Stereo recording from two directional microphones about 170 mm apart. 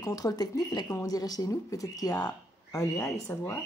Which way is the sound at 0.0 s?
20° left (ahead or behind).